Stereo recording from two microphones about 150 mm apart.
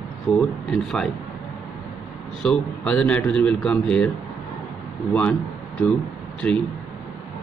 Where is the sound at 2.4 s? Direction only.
5° left (ahead or behind).